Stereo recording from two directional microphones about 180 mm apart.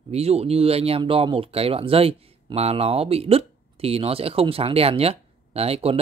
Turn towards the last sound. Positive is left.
turn(degrees=-35)  # may be behind; listen again after turning